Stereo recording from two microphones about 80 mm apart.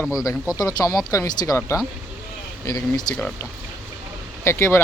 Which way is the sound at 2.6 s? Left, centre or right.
Left.